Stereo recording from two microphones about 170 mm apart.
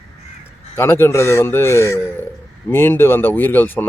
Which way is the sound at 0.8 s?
15° left (ahead or behind).